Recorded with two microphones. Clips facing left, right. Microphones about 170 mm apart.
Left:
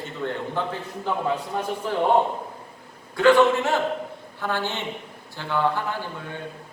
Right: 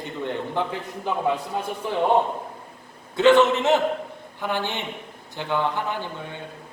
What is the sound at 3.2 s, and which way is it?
A man's voice, 20° right (ahead or behind).